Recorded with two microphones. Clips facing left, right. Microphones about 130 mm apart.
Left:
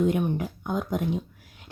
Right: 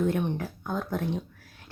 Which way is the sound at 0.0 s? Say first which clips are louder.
Left 3 dB; 10° left (ahead or behind).